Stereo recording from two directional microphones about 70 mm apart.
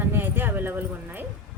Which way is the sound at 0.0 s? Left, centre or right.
Right.